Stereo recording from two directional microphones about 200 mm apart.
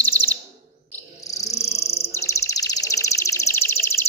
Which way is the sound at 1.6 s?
30° left (ahead or behind).